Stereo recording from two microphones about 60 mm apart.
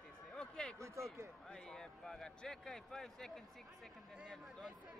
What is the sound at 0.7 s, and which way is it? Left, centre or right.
Speech, right.